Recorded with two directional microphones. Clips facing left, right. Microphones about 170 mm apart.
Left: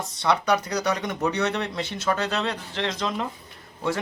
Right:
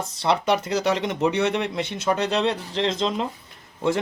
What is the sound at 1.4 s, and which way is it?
Speech, 15° right (ahead or behind).